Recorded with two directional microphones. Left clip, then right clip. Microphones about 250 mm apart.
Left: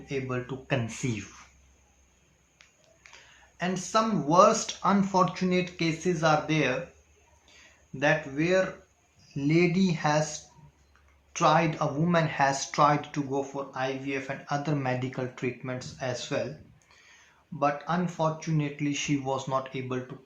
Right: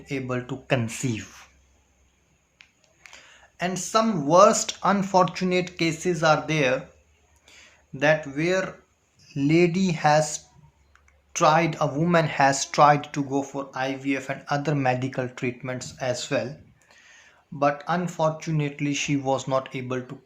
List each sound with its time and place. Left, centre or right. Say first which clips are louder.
0.0 s speech: right 3 dB; right
3.0 s a sound: right 5 dB; right
3.6 s speech: right 3 dB; right
7.4 s a sound: right 5 dB; right
9.2 s speech: right 4 dB; right
17.6 s speech: right 4 dB; right